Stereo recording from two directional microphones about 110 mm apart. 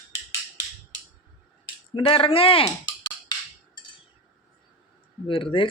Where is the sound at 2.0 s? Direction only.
55° left (ahead or behind).